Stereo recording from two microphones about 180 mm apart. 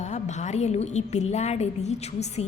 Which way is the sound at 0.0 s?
40° left (ahead or behind).